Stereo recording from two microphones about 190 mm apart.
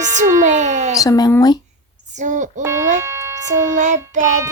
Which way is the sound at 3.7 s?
40° right (ahead or behind).